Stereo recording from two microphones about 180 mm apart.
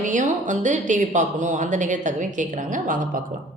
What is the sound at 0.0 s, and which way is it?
Speech, 45° right (ahead or behind).